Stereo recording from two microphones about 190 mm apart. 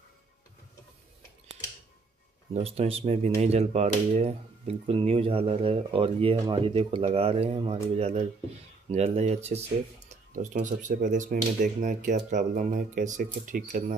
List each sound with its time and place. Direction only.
2.5 s speech: 35° right (ahead or behind)